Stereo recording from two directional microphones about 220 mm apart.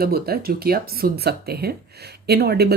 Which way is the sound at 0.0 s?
45° right (ahead or behind).